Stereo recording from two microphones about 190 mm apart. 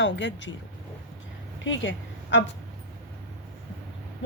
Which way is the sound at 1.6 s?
75° left (ahead or behind).